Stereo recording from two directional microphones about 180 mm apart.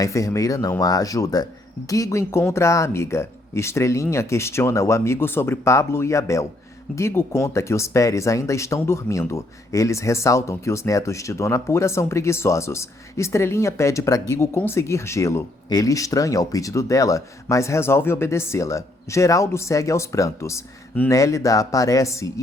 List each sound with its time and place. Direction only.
0.0 s speech: 20° left (ahead or behind)